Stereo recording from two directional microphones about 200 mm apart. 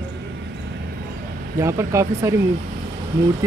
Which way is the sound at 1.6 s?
15° right (ahead or behind).